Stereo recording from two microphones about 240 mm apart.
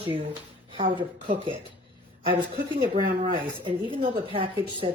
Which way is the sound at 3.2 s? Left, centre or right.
Right.